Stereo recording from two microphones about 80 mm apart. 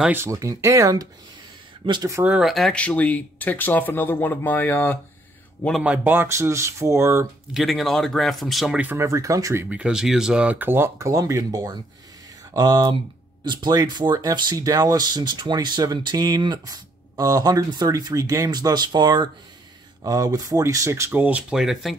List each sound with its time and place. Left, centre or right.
0.3 s speech: right
1.8 s speech: right
2.4 s speech: centre
2.7 s speech: centre
5.9 s speech: right
6.2 s speech: right
7.5 s speech: centre
8.9 s speech: right
9.7 s speech: centre; by 11.6 s right
12.5 s speech: right
20.0 s speech: right
21.1 s speech: centre